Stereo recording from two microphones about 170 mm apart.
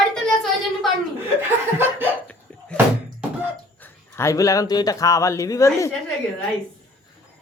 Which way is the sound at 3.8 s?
15° left (ahead or behind).